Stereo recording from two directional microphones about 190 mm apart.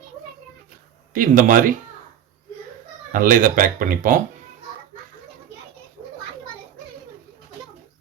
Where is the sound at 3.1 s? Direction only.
45° right (ahead or behind).